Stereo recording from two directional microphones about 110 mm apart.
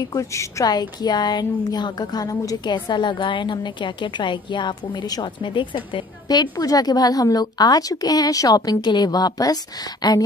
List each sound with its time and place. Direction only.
0.0 s a woman's voice: 35° left (ahead or behind)